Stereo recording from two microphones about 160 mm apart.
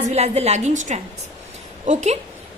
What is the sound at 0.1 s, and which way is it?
A woman's voice, 40° right (ahead or behind).